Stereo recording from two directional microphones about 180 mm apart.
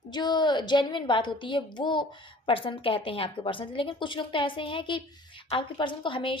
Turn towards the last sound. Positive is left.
turn(degrees=30)  # may be behind; listen again after turning